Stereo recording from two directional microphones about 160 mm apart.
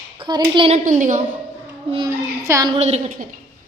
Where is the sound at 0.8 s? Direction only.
50° right (ahead or behind).